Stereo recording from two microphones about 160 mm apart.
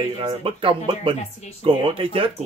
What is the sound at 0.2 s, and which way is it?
Speech, 30° right (ahead or behind).